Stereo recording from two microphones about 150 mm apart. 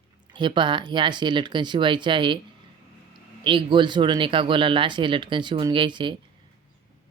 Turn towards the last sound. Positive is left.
turn(degrees=-30)  # may be behind; listen again after turning